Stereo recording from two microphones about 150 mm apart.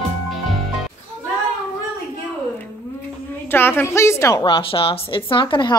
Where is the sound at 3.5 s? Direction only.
15° left (ahead or behind).